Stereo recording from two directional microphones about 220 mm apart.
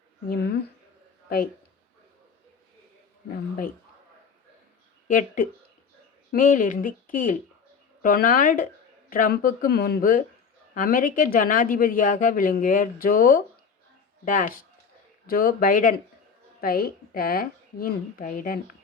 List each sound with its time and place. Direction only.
0.3 s speech: 45° left (ahead or behind)
5.0 s a woman's voice: 35° left (ahead or behind)